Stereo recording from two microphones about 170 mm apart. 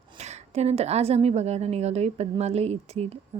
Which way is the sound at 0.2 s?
40° right (ahead or behind).